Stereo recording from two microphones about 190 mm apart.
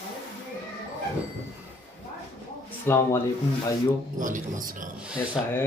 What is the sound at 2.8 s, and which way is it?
Speech, 15° left (ahead or behind).